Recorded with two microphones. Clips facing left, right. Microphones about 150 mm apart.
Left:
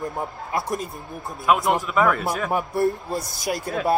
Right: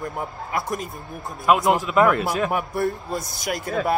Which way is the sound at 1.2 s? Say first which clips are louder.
Right 2 dB; centre (ahead or behind).